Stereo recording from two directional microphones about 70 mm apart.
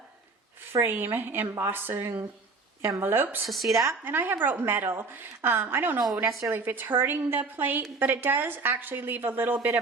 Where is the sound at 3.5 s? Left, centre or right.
Centre.